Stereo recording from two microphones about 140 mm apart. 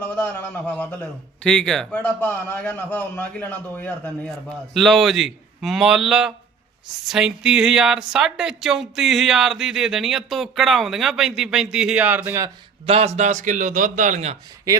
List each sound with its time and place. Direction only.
0.2 s a man's voice: 15° left (ahead or behind); by 12.5 s 15° right (ahead or behind)
12.8 s a man's voice: 45° right (ahead or behind)